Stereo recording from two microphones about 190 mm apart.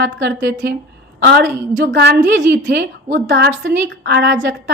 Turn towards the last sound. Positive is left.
turn(degrees=-65)  # may be behind; listen again after turning